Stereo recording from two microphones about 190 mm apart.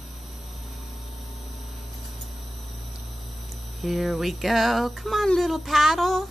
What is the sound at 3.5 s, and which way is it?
Speech, centre (ahead or behind).